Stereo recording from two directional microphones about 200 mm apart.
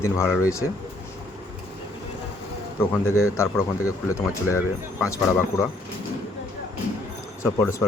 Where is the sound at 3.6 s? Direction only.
15° left (ahead or behind).